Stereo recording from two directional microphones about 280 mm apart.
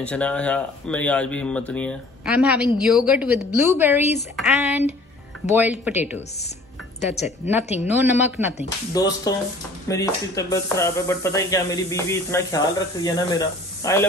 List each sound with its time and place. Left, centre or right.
0.0 s speech: centre
7.0 s speech: left
8.9 s speech: centre